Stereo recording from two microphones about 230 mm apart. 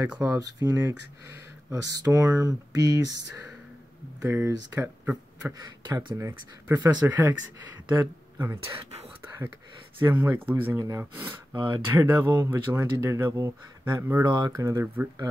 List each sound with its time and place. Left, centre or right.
0.0 s speech: centre
4.2 s speech: centre
9.9 s speech: centre